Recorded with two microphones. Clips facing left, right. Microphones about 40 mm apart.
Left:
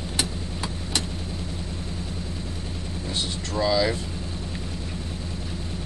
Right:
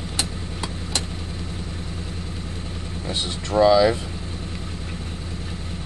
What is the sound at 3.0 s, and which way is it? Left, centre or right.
Speech, right.